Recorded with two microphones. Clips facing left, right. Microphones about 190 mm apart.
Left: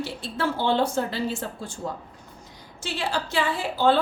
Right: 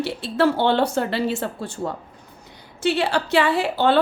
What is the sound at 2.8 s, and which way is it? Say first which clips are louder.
A woman's voice: right 8 dB; 65° right (ahead or behind).